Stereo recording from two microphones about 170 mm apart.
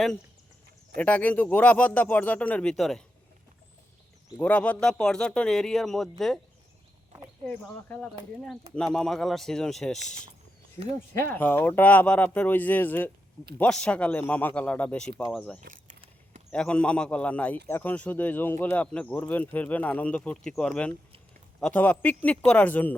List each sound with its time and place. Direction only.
0.9 s speech: 10° left (ahead or behind)
4.4 s speech: 5° left (ahead or behind)
7.4 s speech: 10° left (ahead or behind)
15.6 s a sound: 50° right (ahead or behind)
16.5 s speech: 5° left (ahead or behind)